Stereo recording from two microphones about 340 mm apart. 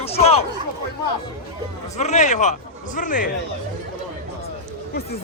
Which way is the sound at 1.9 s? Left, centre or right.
Centre.